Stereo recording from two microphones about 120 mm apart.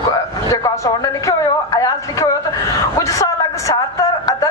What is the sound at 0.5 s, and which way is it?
A woman's voice, 30° left (ahead or behind).